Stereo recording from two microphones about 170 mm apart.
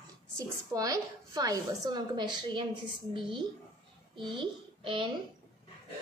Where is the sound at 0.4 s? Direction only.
20° right (ahead or behind).